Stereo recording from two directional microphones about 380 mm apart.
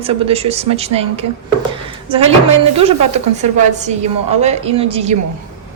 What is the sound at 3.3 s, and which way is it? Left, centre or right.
Speech, centre.